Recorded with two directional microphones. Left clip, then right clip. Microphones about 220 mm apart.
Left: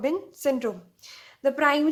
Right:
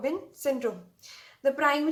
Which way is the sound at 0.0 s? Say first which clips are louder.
Left 4 dB; 40° left (ahead or behind).